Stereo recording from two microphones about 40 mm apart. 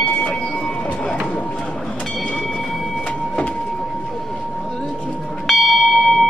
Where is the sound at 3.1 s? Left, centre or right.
Left.